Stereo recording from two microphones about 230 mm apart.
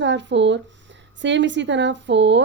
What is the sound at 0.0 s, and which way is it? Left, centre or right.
A woman's voice, right.